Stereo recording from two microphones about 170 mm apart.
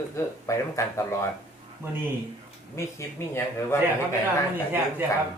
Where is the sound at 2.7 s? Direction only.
15° left (ahead or behind).